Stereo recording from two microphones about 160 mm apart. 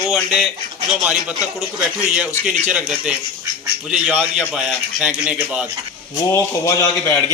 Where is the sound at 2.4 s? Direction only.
5° right (ahead or behind).